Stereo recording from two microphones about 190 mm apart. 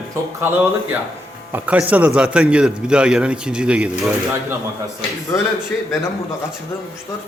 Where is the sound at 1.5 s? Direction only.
10° right (ahead or behind).